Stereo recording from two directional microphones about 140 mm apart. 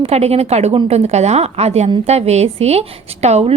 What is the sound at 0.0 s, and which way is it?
A woman's voice, 50° right (ahead or behind).